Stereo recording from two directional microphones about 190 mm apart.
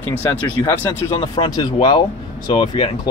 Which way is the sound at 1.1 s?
30° left (ahead or behind).